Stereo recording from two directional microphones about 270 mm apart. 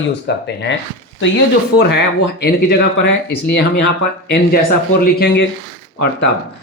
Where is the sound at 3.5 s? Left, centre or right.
Left.